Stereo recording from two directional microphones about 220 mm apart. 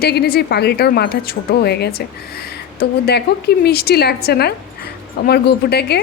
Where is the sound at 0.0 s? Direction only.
45° left (ahead or behind).